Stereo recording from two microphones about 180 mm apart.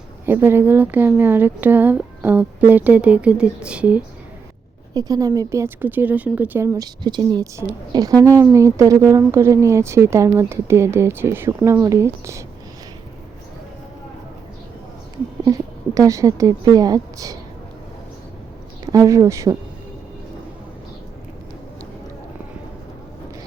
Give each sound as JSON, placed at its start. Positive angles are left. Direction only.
{"t": 0.3, "sound": "a woman's voice", "side_deg": -10}
{"t": 4.9, "sound": "a woman's voice", "side_deg": -20}
{"t": 15.4, "sound": "speech", "side_deg": -20}
{"t": 18.9, "sound": "speech", "side_deg": -20}